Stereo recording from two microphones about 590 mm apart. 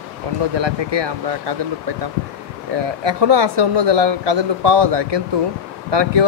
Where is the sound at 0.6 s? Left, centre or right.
Right.